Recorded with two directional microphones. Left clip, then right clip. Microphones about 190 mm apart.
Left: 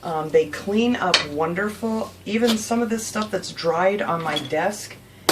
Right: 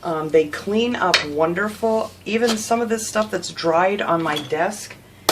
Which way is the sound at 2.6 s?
45° right (ahead or behind).